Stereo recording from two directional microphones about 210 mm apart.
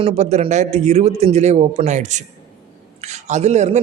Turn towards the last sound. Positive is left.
turn(degrees=-35)  # may be behind; listen again after turning